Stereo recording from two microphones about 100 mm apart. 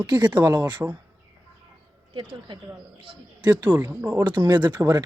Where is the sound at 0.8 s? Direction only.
20° right (ahead or behind).